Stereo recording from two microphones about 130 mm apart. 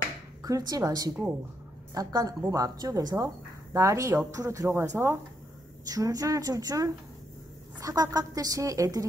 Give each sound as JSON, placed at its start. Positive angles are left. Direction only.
{"t": 0.4, "sound": "a woman's voice", "side_deg": -30}